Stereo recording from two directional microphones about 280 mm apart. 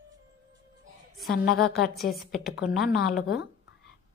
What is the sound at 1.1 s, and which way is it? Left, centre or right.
A woman's voice, centre.